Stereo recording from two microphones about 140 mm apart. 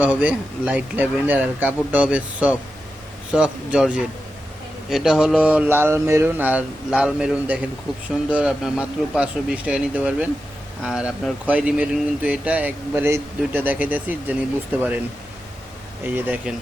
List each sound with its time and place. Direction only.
0.0 s a man's voice: 10° right (ahead or behind)
16.0 s speech: 15° right (ahead or behind)